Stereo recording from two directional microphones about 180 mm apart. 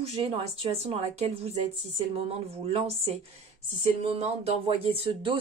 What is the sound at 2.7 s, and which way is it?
A woman's voice, 30° right (ahead or behind).